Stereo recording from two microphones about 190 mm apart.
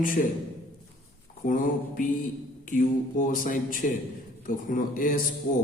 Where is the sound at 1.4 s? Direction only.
45° left (ahead or behind).